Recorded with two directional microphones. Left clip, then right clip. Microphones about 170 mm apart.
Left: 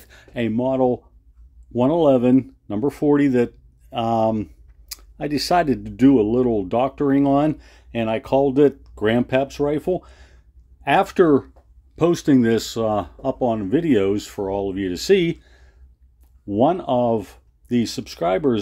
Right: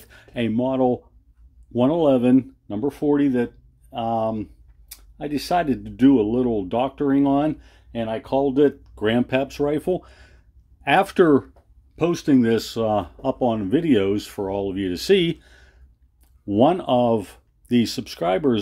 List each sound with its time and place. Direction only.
0.0 s speech: 10° left (ahead or behind)
2.7 s speech: 30° left (ahead or behind); by 11.5 s centre (ahead or behind)
11.9 s speech: 20° left (ahead or behind); by 18.6 s centre (ahead or behind)